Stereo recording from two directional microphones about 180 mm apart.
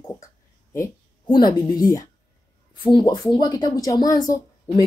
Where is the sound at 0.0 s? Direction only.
15° left (ahead or behind).